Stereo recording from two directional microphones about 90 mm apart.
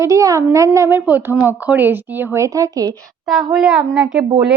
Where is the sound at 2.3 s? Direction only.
35° right (ahead or behind).